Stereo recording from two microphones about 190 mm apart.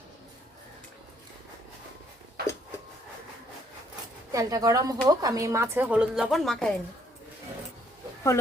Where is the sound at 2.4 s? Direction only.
55° right (ahead or behind).